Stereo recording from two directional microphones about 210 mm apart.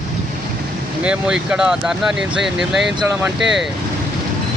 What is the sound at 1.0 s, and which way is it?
Speech, 5° right (ahead or behind).